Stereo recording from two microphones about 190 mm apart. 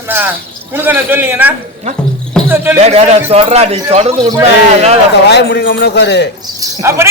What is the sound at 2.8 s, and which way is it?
Speech, 35° right (ahead or behind).